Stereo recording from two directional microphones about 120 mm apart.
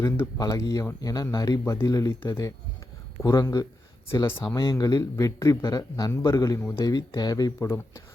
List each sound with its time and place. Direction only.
0.0 s speech: 25° left (ahead or behind)
4.1 s speech: 20° left (ahead or behind)